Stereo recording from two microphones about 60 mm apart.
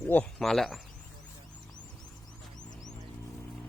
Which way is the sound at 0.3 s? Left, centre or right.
Centre.